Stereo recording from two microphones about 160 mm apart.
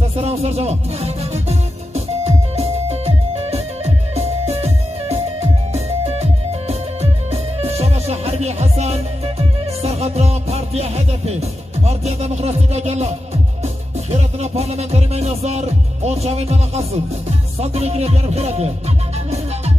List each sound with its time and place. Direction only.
0.1 s music: 40° right (ahead or behind)
14.1 s music: 40° right (ahead or behind)